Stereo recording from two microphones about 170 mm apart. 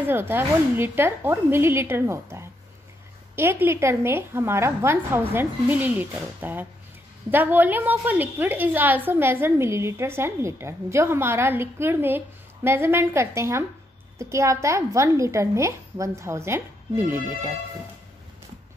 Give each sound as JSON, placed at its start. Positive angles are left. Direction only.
{"t": 0.1, "sound": "a woman's voice", "side_deg": -15}